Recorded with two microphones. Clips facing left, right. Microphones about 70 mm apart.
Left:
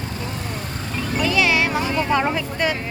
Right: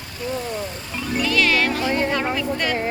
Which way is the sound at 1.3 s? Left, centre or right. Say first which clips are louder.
Even; centre.